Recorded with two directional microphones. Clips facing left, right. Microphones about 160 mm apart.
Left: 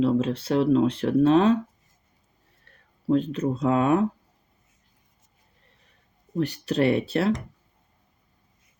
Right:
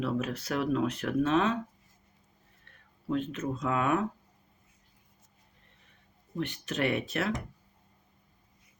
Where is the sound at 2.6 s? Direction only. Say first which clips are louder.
Left 10 dB; 35° left (ahead or behind).